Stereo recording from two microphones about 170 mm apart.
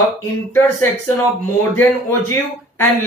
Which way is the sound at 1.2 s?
15° left (ahead or behind).